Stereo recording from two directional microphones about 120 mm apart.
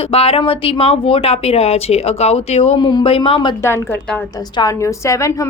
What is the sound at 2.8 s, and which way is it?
Speech, 40° left (ahead or behind).